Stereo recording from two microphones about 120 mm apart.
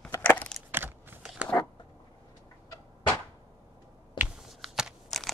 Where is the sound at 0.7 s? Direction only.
15° right (ahead or behind).